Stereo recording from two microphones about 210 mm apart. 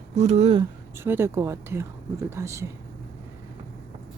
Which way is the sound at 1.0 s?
10° right (ahead or behind).